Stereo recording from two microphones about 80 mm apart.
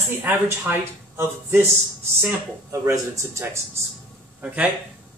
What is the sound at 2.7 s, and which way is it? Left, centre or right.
Speech, right.